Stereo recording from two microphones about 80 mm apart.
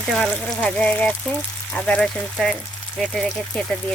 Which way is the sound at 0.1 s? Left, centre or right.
Centre.